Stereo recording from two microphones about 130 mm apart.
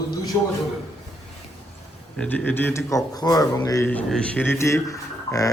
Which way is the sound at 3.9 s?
10° left (ahead or behind).